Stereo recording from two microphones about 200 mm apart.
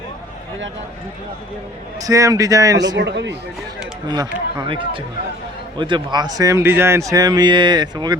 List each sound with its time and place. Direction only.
2.0 s a man's voice: 15° right (ahead or behind)
3.0 s speech: 60° right (ahead or behind)
4.1 s speech: 20° right (ahead or behind)